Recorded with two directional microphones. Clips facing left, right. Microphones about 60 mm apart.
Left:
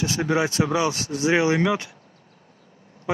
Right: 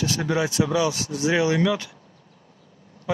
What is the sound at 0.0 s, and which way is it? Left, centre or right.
Speech, left.